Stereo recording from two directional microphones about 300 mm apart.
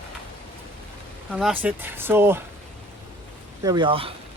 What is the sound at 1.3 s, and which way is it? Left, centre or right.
Speech, centre.